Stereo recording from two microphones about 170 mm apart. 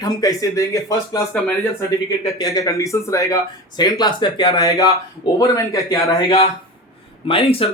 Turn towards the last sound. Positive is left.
turn(degrees=35)  # may be behind; listen again after turning